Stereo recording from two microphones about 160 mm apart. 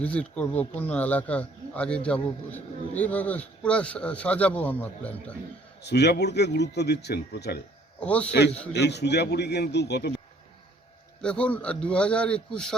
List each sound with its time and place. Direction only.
0.0 s a man's voice: 10° left (ahead or behind)
5.8 s a man's voice: 90° left
7.9 s a man's voice: 10° left (ahead or behind)
8.3 s a man's voice: 90° left
11.2 s a man's voice: 5° left (ahead or behind)